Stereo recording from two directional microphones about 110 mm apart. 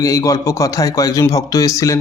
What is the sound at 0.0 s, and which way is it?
Speech, 30° left (ahead or behind).